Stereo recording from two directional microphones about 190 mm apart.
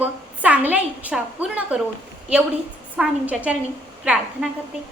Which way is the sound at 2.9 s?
5° right (ahead or behind).